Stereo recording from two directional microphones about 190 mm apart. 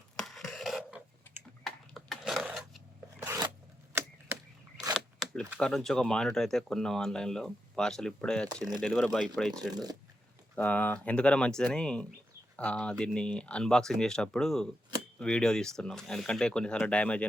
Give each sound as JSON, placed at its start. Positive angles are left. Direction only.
{"t": 0.2, "sound": "computer keyboard", "side_deg": 0}
{"t": 3.2, "sound": "a sound", "side_deg": -15}
{"t": 4.9, "sound": "a sound", "side_deg": 0}
{"t": 5.5, "sound": "speech", "side_deg": 5}
{"t": 9.5, "sound": "speech", "side_deg": -20}
{"t": 10.5, "sound": "speech", "side_deg": 10}